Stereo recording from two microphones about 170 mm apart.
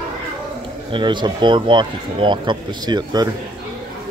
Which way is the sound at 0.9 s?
30° right (ahead or behind).